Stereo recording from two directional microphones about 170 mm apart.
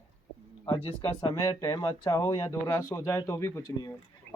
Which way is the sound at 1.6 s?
20° left (ahead or behind).